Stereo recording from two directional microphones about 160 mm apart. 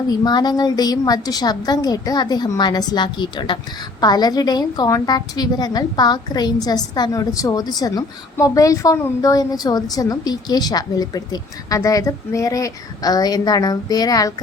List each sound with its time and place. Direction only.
0.1 s a woman's voice: 25° left (ahead or behind)